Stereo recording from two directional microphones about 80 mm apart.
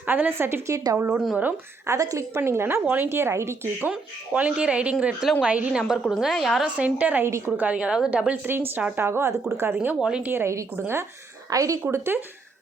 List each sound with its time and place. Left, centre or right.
0.0 s a woman's voice: right
1.9 s a woman's voice: right
3.8 s speech: centre
5.9 s a woman's voice: centre
6.7 s a woman's voice: centre
8.3 s a woman's voice: right
9.8 s speech: centre
10.2 s a woman's voice: right
11.5 s speech: right
11.8 s a woman's voice: right